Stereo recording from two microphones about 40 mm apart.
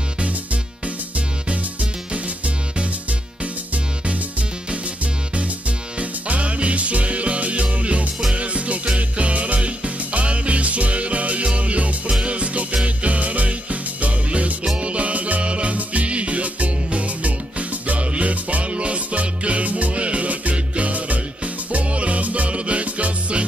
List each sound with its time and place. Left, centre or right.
1.1 s music: right
5.9 s music: right